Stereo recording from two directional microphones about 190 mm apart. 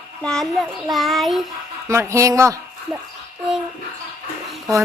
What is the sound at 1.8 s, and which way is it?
Speech, 15° right (ahead or behind).